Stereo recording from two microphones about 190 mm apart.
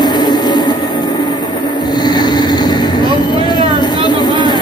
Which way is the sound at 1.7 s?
20° left (ahead or behind).